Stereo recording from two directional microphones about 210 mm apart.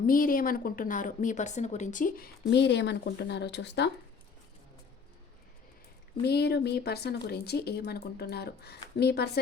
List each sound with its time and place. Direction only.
0.0 s a woman's voice: 40° left (ahead or behind)
2.5 s speech: 55° left (ahead or behind)
6.2 s speech: 50° left (ahead or behind)